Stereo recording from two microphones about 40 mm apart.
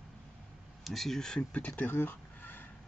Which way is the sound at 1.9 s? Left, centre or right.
Left.